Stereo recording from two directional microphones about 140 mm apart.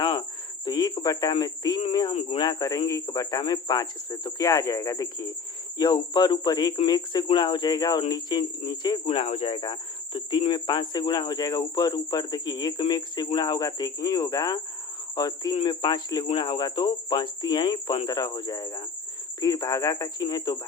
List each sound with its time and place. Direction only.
0.0 s cricket: 30° left (ahead or behind)
1.9 s speech: 35° left (ahead or behind)
9.2 s speech: 50° left (ahead or behind); by 20.6 s 30° left (ahead or behind)